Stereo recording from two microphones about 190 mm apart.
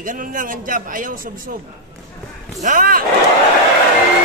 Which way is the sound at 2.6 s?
45° right (ahead or behind).